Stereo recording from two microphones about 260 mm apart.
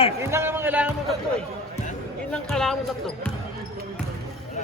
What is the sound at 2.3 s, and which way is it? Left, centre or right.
Speech, centre.